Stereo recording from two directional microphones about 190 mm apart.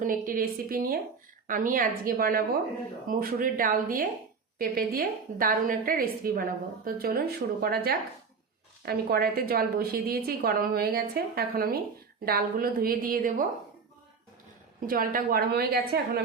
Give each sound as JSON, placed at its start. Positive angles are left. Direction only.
{"t": 0.0, "sound": "a woman's voice", "side_deg": -45}
{"t": 14.8, "sound": "a woman's voice", "side_deg": -50}